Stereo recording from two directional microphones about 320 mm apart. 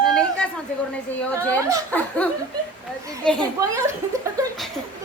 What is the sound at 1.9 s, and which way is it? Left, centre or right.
Speech, centre.